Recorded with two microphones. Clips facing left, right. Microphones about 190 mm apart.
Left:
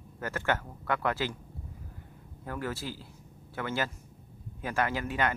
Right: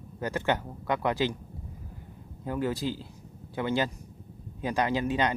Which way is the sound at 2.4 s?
20° right (ahead or behind).